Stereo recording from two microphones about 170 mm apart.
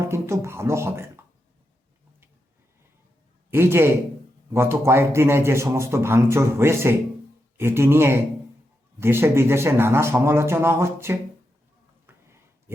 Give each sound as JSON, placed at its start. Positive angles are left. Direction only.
{"t": 0.0, "sound": "beatboxing", "side_deg": -15}
{"t": 3.5, "sound": "speech", "side_deg": -15}
{"t": 12.0, "sound": "a sound", "side_deg": -15}